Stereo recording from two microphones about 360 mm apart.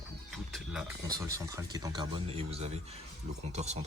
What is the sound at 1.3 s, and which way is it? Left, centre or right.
Speech, centre.